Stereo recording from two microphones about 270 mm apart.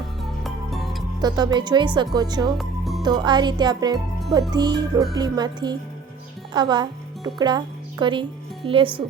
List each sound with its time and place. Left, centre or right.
0.2 s music: centre
1.2 s speech: centre
2.6 s music: centre
3.0 s speech: centre